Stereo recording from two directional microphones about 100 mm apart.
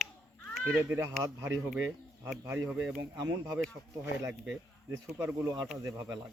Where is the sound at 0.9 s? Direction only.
30° right (ahead or behind).